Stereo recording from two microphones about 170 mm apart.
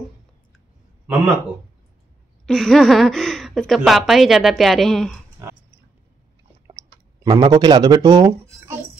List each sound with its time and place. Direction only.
1.1 s a man's voice: 10° right (ahead or behind)
2.4 s a woman's voice: 5° left (ahead or behind)
5.4 s pig: 15° right (ahead or behind)
7.2 s a woman's voice: 25° right (ahead or behind)